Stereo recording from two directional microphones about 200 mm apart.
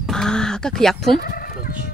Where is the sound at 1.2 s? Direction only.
50° left (ahead or behind).